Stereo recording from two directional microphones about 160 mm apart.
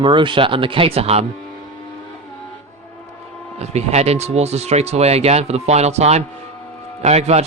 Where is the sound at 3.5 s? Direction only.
45° right (ahead or behind).